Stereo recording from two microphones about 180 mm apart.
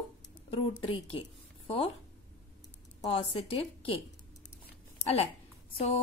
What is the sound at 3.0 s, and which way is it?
A woman's voice, 35° left (ahead or behind).